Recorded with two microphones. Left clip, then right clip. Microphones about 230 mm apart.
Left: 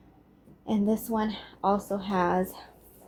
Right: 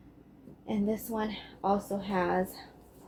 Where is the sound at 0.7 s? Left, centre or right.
Left.